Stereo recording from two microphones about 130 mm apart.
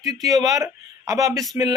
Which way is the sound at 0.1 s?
30° right (ahead or behind).